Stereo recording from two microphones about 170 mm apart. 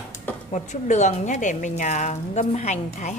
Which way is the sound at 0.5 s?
45° left (ahead or behind).